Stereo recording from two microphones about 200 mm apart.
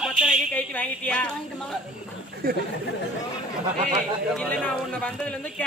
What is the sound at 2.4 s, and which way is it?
Speech, 50° right (ahead or behind).